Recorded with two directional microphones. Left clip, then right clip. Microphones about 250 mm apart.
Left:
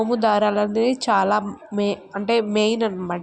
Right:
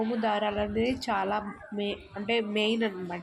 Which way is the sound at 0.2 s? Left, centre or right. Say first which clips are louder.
Left 10 dB; left.